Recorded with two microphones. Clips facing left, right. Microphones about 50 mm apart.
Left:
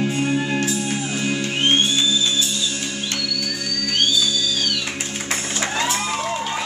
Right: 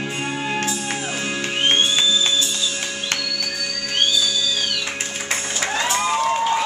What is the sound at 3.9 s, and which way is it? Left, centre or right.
Music, centre.